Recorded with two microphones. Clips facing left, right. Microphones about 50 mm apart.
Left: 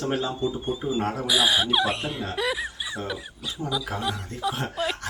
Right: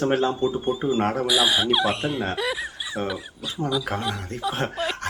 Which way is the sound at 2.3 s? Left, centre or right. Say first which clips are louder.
Even; centre.